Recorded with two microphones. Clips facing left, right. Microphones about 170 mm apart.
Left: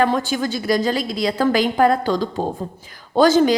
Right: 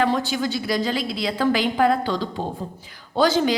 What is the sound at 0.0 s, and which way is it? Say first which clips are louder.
A woman's voice: left 3 dB; 45° left (ahead or behind).